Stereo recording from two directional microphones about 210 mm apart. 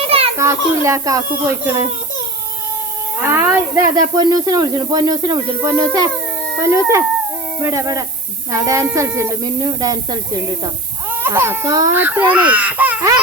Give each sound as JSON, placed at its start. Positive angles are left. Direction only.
{"t": 0.3, "sound": "speech", "side_deg": -15}
{"t": 3.2, "sound": "speech", "side_deg": -10}